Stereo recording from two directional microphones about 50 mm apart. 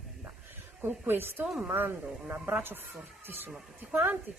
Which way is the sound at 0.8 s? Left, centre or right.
Right.